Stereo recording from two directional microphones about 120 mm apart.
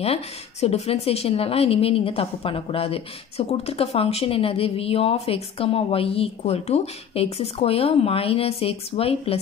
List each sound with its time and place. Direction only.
0.0 s a woman's voice: 55° left (ahead or behind)